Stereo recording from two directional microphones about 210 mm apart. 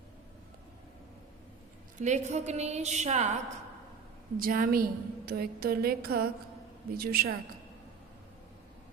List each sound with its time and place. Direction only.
2.0 s a woman's voice: 35° right (ahead or behind)
4.4 s a woman's voice: 45° right (ahead or behind)